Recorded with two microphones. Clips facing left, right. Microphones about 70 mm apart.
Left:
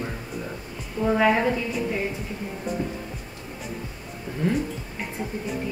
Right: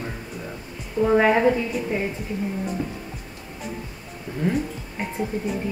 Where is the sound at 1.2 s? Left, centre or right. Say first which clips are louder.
Right 2 dB; centre.